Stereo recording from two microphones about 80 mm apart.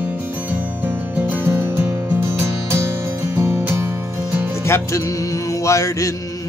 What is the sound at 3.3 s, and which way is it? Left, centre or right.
Music, right.